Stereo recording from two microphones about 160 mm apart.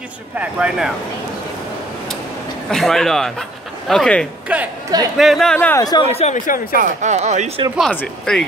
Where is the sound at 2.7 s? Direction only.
Centre (ahead or behind).